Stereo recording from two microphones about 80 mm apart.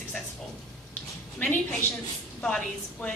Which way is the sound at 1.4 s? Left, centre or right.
Centre.